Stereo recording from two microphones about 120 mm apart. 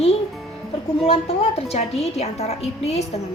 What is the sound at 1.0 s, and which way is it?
A woman's voice, 55° left (ahead or behind).